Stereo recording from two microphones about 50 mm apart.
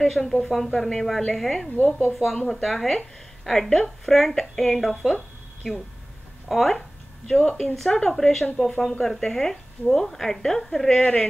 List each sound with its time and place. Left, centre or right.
0.0 s a woman's voice: centre
11.0 s a woman's voice: left